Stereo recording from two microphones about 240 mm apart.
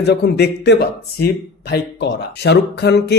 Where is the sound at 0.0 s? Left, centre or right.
Left.